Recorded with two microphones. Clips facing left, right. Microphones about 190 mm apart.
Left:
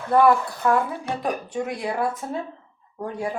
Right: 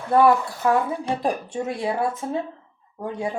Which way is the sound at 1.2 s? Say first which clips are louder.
Right 1 dB; 25° right (ahead or behind).